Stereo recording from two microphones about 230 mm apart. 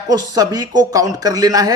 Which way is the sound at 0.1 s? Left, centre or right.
Centre.